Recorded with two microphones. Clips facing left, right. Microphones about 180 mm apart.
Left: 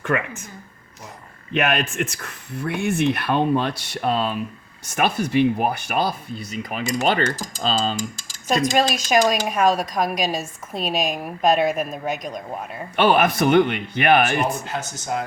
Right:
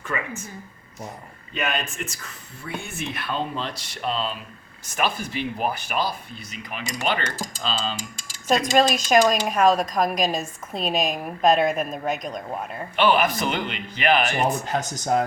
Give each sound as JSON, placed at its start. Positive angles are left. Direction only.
{"t": 0.1, "sound": "speech", "side_deg": 70}
{"t": 1.5, "sound": "speech", "side_deg": 75}
{"t": 6.5, "sound": "speech", "side_deg": 45}
{"t": 8.4, "sound": "speech", "side_deg": 0}
{"t": 13.0, "sound": "speech", "side_deg": 50}